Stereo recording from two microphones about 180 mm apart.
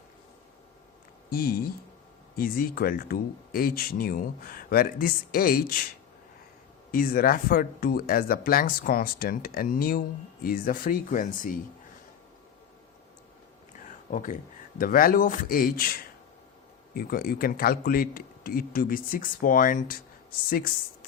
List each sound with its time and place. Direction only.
1.3 s speech: 55° left (ahead or behind)
6.9 s speech: 55° left (ahead or behind)
14.1 s speech: 45° left (ahead or behind)